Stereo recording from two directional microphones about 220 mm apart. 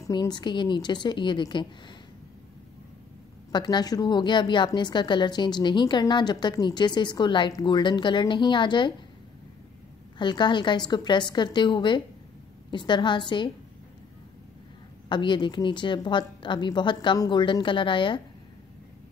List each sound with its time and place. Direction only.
0.0 s a woman's voice: 15° left (ahead or behind)
3.5 s a woman's voice: 20° left (ahead or behind)
10.1 s a woman's voice: 20° left (ahead or behind)
15.0 s a woman's voice: 20° left (ahead or behind)